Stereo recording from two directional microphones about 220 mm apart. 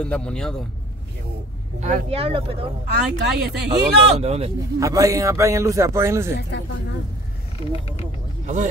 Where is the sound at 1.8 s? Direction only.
30° right (ahead or behind).